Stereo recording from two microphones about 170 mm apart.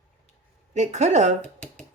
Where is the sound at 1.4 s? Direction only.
10° left (ahead or behind).